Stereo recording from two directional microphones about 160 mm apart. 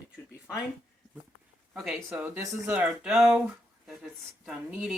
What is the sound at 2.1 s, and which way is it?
Speech, 10° right (ahead or behind).